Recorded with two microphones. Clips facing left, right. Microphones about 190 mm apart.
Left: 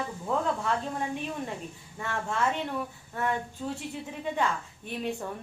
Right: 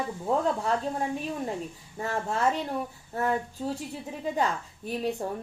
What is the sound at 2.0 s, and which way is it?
A woman's voice, 35° right (ahead or behind).